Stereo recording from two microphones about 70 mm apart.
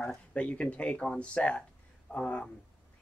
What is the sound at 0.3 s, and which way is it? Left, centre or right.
Speech, centre.